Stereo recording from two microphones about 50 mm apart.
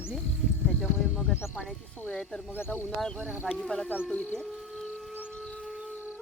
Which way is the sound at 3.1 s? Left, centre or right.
Right.